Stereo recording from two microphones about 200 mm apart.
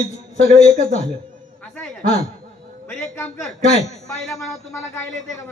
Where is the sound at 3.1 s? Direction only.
10° left (ahead or behind).